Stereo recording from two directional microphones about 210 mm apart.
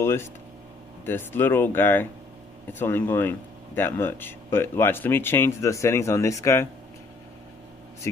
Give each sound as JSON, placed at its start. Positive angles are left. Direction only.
{"t": 0.0, "sound": "speech", "side_deg": 10}